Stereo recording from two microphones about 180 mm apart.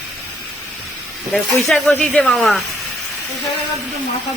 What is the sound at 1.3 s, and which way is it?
Speech, 5° left (ahead or behind).